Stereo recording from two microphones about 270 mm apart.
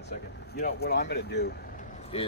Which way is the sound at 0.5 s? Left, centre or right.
Left.